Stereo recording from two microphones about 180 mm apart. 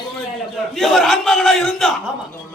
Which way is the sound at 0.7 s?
Centre (ahead or behind).